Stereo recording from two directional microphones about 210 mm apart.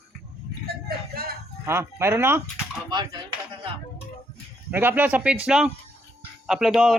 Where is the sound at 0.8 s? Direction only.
45° right (ahead or behind).